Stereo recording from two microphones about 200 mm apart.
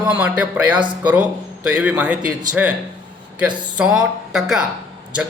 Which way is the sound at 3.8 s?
5° right (ahead or behind).